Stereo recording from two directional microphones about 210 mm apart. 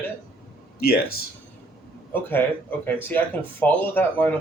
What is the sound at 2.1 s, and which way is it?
Speech, 10° left (ahead or behind).